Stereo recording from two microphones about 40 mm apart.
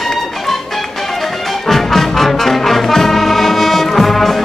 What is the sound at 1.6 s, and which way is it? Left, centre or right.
Music, centre.